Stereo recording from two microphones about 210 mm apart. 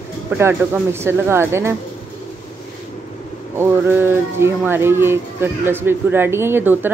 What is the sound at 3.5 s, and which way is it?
Speech, 10° right (ahead or behind).